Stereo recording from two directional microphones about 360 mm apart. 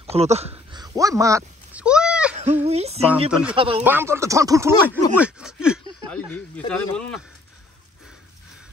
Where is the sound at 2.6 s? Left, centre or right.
Centre.